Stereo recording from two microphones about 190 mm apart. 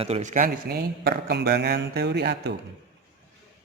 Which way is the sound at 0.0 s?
35° right (ahead or behind).